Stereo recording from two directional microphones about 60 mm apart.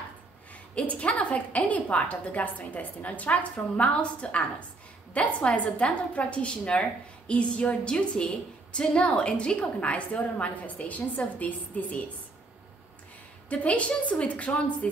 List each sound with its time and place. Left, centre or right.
0.5 s a woman's voice: left
13.5 s a woman's voice: left